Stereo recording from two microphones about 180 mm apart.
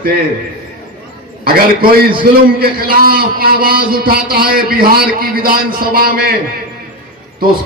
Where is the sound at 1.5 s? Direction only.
55° right (ahead or behind).